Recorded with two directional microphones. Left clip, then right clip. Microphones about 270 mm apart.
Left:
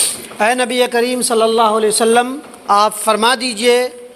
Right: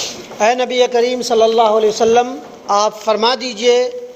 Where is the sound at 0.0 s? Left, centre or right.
Left.